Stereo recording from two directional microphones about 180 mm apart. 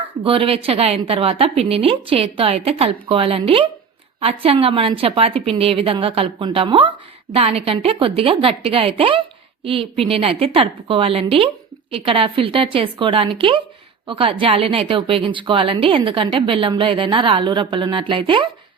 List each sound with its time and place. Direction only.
0.3 s a woman's voice: 30° right (ahead or behind)